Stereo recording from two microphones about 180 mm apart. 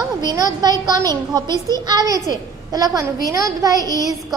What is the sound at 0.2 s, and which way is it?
A woman's voice, 20° right (ahead or behind).